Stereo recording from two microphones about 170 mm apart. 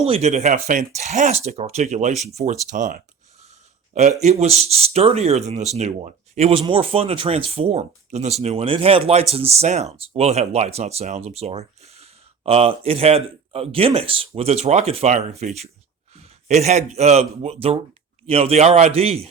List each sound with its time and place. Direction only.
0.0 s speech: 40° right (ahead or behind)
4.2 s speech: 40° right (ahead or behind)